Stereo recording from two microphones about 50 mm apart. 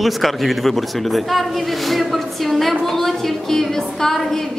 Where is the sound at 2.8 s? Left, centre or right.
Centre.